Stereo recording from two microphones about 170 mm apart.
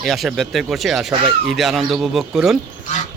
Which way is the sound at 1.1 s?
30° right (ahead or behind).